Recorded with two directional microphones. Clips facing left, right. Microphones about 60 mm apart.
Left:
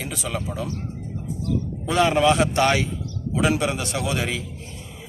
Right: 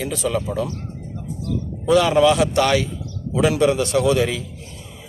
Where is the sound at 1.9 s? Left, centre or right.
Left.